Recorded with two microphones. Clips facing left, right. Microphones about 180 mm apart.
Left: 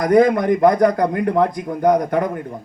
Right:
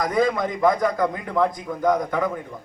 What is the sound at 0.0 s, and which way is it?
A man's voice, 60° left (ahead or behind).